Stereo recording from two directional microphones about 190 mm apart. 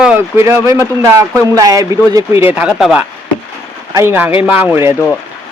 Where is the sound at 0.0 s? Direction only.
10° right (ahead or behind).